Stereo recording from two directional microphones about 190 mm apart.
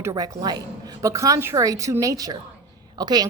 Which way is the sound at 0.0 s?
20° right (ahead or behind).